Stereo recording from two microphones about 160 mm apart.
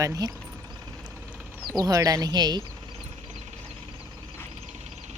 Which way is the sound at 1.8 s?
20° right (ahead or behind).